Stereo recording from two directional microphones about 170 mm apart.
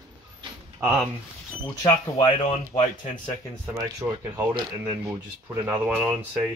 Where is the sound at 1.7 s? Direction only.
20° left (ahead or behind).